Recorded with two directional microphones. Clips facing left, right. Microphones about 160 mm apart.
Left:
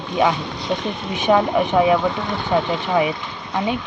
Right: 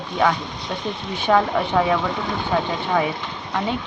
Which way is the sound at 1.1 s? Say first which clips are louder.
Left 2 dB; 15° left (ahead or behind).